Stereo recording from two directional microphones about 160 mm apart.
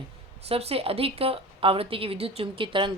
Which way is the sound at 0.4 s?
40° right (ahead or behind).